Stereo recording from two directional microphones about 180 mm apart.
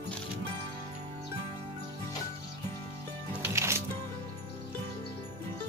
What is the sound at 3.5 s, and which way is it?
Music, 15° right (ahead or behind).